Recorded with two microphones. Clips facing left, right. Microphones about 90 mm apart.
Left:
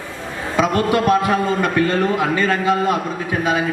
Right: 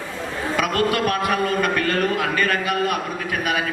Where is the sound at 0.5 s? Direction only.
25° left (ahead or behind).